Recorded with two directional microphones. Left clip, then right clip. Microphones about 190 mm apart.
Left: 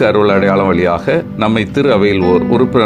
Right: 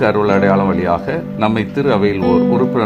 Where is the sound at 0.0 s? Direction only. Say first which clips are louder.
Left 3 dB; 10° left (ahead or behind).